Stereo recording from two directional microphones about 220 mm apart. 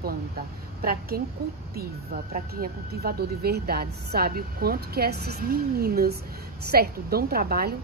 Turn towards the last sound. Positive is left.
turn(degrees=-45)  # may be behind; listen again after turning